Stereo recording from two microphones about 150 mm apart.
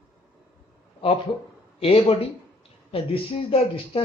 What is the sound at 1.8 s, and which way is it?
Speech, 40° left (ahead or behind).